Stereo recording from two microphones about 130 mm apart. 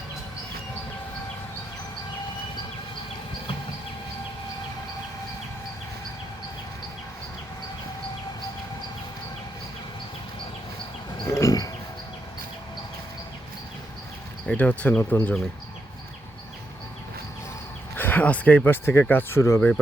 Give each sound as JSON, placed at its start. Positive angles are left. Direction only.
{"t": 11.3, "sound": "a sound", "side_deg": 25}
{"t": 14.4, "sound": "speech", "side_deg": 10}
{"t": 17.9, "sound": "speech", "side_deg": 15}